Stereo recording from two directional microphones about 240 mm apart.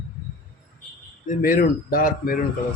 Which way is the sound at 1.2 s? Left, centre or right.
Left.